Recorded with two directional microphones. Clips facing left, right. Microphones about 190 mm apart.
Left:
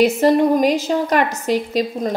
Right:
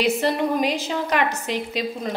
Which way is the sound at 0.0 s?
45° left (ahead or behind).